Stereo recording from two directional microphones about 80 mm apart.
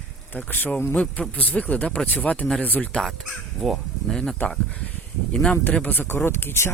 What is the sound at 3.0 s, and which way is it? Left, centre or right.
Speech, centre.